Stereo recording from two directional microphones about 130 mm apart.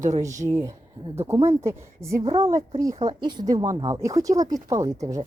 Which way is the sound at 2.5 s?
25° right (ahead or behind).